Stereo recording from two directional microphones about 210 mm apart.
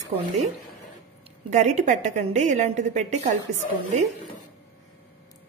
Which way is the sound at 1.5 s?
35° right (ahead or behind).